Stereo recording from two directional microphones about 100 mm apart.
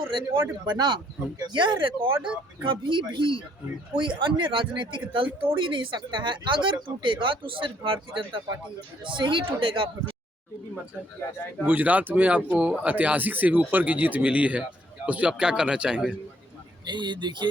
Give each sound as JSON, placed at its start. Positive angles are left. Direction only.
{"t": 0.1, "sound": "speech", "side_deg": -50}
{"t": 2.2, "sound": "speech", "side_deg": -10}
{"t": 2.6, "sound": "speech", "side_deg": -55}
{"t": 11.6, "sound": "speech", "side_deg": -15}
{"t": 16.8, "sound": "speech", "side_deg": -50}